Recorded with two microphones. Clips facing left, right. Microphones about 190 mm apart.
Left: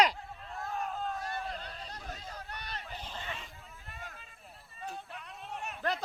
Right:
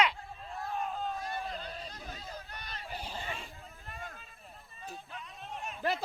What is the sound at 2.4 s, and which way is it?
Boat, 70° left (ahead or behind).